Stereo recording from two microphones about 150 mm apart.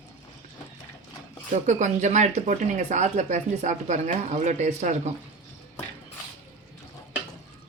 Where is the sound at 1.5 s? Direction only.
55° right (ahead or behind).